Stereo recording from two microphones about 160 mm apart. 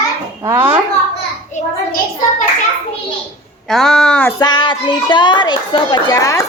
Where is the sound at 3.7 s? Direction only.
5° left (ahead or behind).